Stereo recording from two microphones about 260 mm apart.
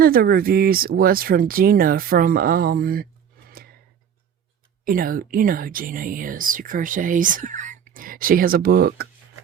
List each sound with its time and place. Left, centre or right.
0.0 s speech: right
4.9 s speech: right